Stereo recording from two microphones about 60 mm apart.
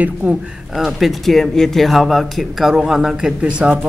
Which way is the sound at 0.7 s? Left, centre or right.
Centre.